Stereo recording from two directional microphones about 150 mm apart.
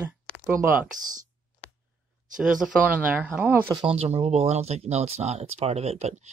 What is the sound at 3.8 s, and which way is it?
Speech, 45° right (ahead or behind).